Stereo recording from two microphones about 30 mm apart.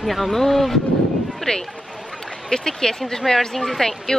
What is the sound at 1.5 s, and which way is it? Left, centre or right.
A woman's voice, left.